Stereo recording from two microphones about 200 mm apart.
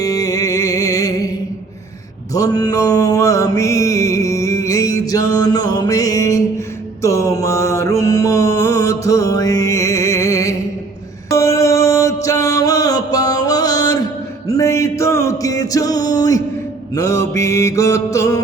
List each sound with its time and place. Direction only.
0.0 s music: 15° left (ahead or behind)
2.3 s mantra: 20° left (ahead or behind)
11.3 s music: 15° left (ahead or behind)
16.9 s mantra: 15° left (ahead or behind)